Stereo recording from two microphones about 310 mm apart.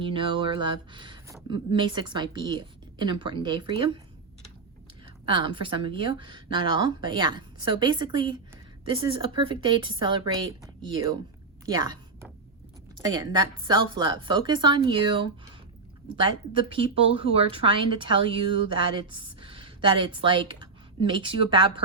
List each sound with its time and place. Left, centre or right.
0.0 s speech: centre
5.2 s a woman's voice: centre